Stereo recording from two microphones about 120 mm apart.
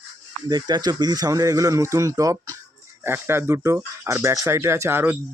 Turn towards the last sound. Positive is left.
turn(degrees=-20)  # may be behind; listen again after turning